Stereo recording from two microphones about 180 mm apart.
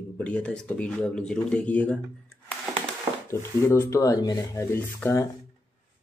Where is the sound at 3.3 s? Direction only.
15° left (ahead or behind).